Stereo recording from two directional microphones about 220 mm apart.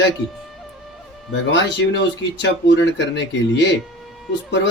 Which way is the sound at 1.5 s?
55° left (ahead or behind).